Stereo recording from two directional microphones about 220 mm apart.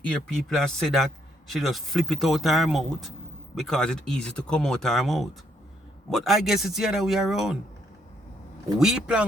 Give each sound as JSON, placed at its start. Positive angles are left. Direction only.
{"t": 0.0, "sound": "speech", "side_deg": 5}
{"t": 8.8, "sound": "speech", "side_deg": -5}